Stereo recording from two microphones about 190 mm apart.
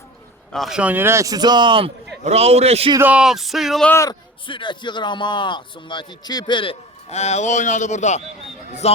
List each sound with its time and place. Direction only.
0.5 s a man's voice: centre (ahead or behind); by 2.9 s 35° right (ahead or behind)
2.9 s speech: 10° right (ahead or behind)
3.9 s a man's voice: 20° left (ahead or behind)